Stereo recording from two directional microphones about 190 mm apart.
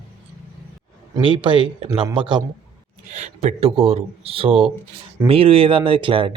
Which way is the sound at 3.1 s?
40° right (ahead or behind).